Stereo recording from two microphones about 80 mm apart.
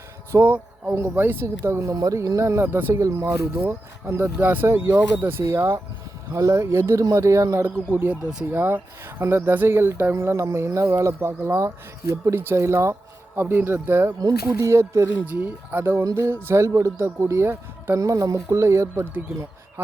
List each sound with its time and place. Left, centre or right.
0.3 s speech: right
4.1 s speech: right
5.4 s speech: right
7.6 s speech: right
8.1 s speech: centre
8.4 s speech: right
14.2 s speech: right
15.1 s speech: right
18.0 s speech: right